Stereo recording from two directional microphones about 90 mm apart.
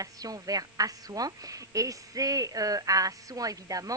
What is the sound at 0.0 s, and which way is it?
A woman's voice, 45° right (ahead or behind).